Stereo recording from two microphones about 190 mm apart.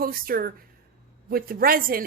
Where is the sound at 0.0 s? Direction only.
50° right (ahead or behind).